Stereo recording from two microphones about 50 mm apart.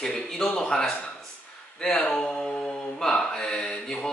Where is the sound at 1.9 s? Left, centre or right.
Left.